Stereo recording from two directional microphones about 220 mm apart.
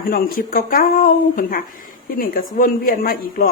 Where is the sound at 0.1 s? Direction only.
40° left (ahead or behind).